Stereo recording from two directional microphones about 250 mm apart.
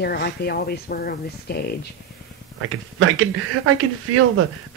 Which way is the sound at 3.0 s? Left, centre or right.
Right.